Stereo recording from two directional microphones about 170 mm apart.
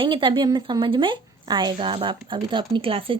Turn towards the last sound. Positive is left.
turn(degrees=-30)  # may be behind; listen again after turning